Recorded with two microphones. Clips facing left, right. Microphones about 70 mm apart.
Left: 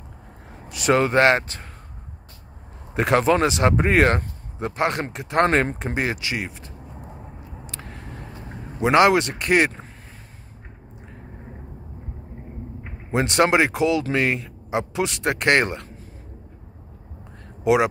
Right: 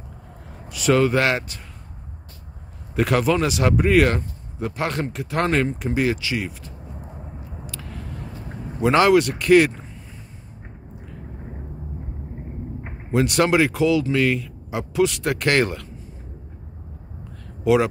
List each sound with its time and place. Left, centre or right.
0.5 s a man's voice: left
2.9 s speech: left
7.6 s vehicle: left
8.8 s speech: left
13.1 s speech: left